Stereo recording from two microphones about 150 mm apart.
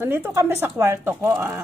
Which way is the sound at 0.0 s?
15° right (ahead or behind).